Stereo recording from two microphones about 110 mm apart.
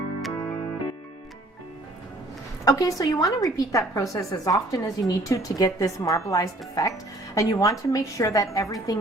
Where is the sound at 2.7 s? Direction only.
30° left (ahead or behind).